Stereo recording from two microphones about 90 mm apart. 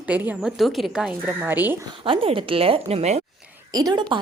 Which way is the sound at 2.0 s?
80° right.